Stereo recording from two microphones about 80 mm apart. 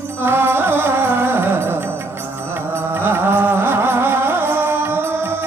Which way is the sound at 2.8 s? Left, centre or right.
Right.